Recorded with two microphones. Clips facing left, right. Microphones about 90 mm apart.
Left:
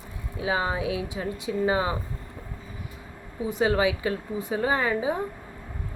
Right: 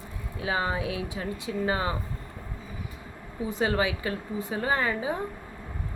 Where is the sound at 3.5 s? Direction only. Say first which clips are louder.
Left 3 dB; 15° left (ahead or behind).